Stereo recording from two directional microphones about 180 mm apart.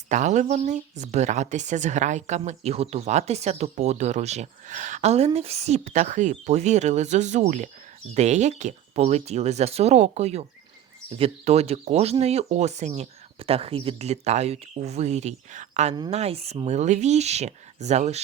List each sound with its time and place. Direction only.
0.1 s speech: 40° right (ahead or behind)